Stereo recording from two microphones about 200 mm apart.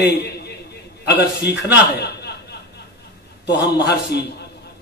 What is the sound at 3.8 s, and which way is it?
Speech, 55° left (ahead or behind).